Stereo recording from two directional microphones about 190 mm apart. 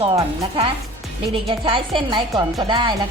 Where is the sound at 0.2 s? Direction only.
25° right (ahead or behind).